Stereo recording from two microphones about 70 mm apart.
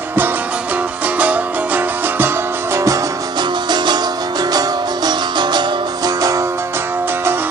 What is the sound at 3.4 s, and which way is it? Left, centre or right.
Music, right.